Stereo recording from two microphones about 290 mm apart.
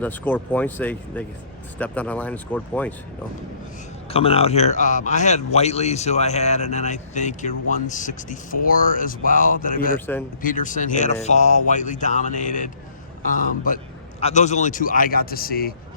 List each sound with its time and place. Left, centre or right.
0.0 s speech: centre
4.1 s speech: centre